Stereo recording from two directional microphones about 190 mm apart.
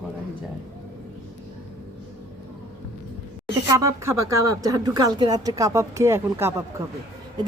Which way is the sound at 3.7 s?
15° right (ahead or behind).